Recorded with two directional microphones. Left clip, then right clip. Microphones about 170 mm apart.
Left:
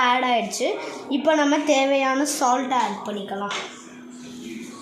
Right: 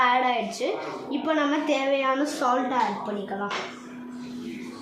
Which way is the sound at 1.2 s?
60° left (ahead or behind).